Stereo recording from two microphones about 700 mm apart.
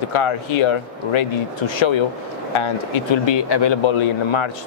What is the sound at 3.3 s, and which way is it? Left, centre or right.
Speech, left.